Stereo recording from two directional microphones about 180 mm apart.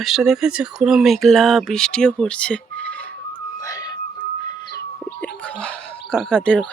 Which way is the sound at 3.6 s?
20° left (ahead or behind).